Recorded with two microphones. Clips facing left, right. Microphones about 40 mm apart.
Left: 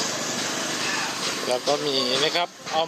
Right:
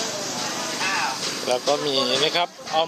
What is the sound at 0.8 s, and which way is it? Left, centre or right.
Vehicle, right.